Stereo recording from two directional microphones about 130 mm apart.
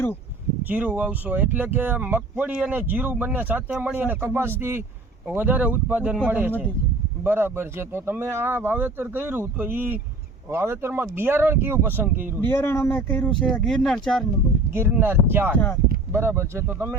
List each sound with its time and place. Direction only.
0.6 s speech: 15° right (ahead or behind)
12.4 s speech: 15° left (ahead or behind)
14.7 s speech: 20° right (ahead or behind)
15.5 s speech: 15° left (ahead or behind)
16.1 s speech: 20° right (ahead or behind)